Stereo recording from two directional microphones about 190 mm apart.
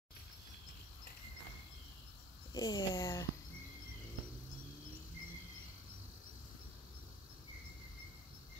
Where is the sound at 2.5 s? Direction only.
20° left (ahead or behind).